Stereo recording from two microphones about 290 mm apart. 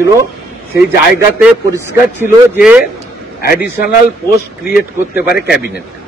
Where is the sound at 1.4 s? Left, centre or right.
Centre.